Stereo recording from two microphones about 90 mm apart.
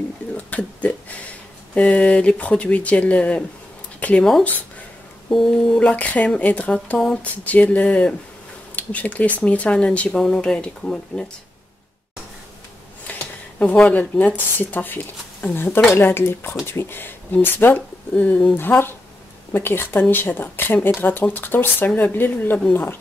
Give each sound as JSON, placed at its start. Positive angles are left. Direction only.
{"t": 0.3, "sound": "a sound", "side_deg": 15}
{"t": 1.8, "sound": "speech", "side_deg": 15}
{"t": 5.9, "sound": "speech", "side_deg": 15}
{"t": 13.8, "sound": "speech", "side_deg": 20}